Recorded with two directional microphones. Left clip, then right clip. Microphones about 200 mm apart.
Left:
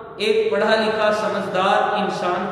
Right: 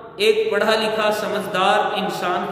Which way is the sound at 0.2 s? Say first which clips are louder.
Right 1 dB; 60° right (ahead or behind).